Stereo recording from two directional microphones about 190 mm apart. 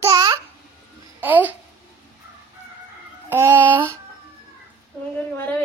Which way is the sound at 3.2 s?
10° right (ahead or behind).